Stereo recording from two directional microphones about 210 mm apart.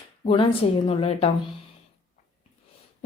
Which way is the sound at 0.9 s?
30° left (ahead or behind).